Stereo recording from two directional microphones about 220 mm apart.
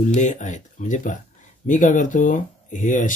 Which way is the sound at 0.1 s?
35° left (ahead or behind).